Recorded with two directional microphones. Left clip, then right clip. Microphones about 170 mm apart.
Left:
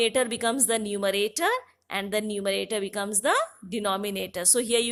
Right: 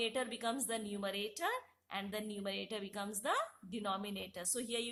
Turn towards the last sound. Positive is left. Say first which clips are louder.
# left 16 dB
turn(degrees=40)  # may be behind; listen again after turning